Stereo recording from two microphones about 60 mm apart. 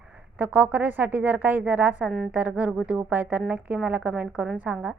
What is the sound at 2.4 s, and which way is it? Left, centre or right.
A woman's voice, right.